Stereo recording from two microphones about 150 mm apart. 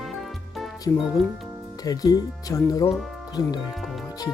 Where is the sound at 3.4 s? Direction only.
25° left (ahead or behind).